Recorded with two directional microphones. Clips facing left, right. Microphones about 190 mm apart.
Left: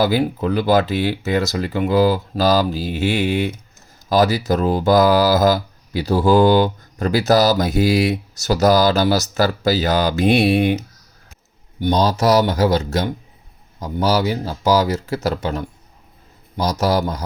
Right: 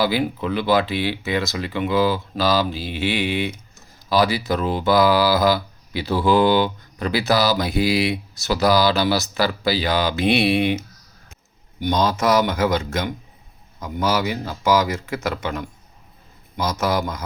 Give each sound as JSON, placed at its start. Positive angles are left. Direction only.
{"t": 0.0, "sound": "speech", "side_deg": 45}
{"t": 11.8, "sound": "speech", "side_deg": 35}